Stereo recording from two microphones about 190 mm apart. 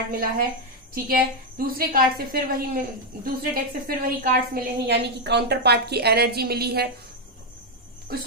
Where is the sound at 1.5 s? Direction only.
50° right (ahead or behind).